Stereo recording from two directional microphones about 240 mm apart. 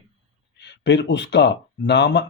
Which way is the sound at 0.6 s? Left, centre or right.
Left.